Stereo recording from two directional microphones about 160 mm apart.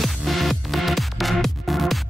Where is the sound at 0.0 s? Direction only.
Centre (ahead or behind).